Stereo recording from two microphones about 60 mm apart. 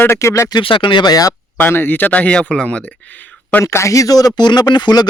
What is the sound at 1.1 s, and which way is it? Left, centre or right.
Speech, left.